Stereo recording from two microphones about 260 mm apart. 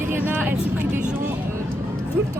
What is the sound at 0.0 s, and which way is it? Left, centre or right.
Vehicle, centre.